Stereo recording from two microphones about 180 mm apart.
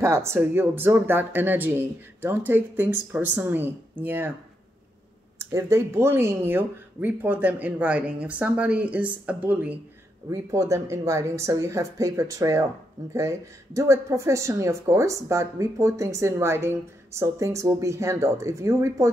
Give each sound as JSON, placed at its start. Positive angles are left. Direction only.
{"t": 0.0, "sound": "speech", "side_deg": -15}
{"t": 5.4, "sound": "speech", "side_deg": -15}